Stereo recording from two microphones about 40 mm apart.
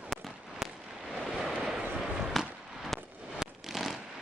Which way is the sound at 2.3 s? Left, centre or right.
Centre.